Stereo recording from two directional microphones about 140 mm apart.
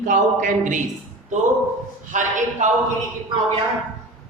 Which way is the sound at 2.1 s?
60° right (ahead or behind).